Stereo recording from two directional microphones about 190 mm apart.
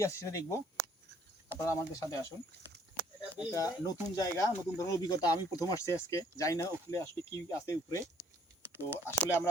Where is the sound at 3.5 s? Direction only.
20° left (ahead or behind).